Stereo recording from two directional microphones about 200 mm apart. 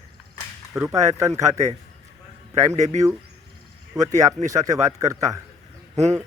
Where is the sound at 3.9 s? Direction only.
15° right (ahead or behind).